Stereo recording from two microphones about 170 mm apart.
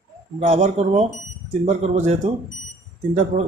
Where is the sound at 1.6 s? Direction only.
40° right (ahead or behind).